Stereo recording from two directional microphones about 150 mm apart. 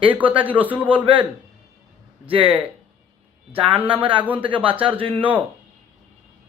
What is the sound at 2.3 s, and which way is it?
Speech, 35° right (ahead or behind).